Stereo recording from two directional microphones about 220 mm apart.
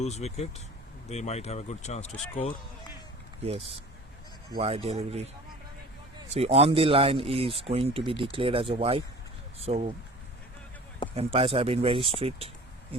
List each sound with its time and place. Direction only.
0.0 s speech: 30° left (ahead or behind)
3.4 s speech: 25° right (ahead or behind)
6.3 s speech: 30° right (ahead or behind)
11.1 s speech: 25° right (ahead or behind)